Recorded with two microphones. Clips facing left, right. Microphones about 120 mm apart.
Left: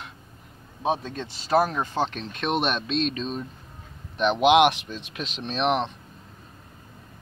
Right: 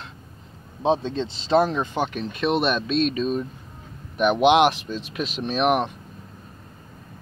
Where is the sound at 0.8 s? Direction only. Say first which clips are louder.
Right 5 dB; 25° right (ahead or behind); by 5.9 s 5° right (ahead or behind).